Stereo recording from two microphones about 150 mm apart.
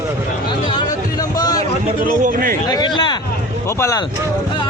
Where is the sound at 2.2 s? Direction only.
65° right (ahead or behind).